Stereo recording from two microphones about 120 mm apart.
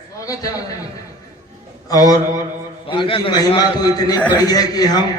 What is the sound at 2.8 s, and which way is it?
A man's voice, 45° left (ahead or behind).